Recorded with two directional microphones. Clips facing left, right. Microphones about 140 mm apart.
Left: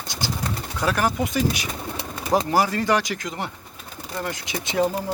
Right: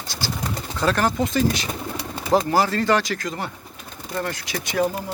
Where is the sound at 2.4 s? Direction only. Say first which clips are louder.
Right 1 dB; 15° left (ahead or behind).